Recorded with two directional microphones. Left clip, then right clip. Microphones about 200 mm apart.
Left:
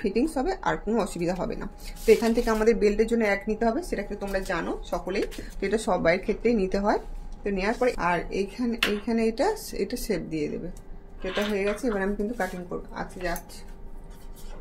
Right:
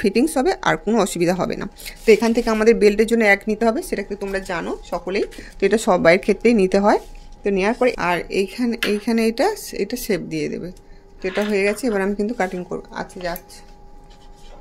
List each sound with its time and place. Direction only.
0.0 s speech: 45° right (ahead or behind)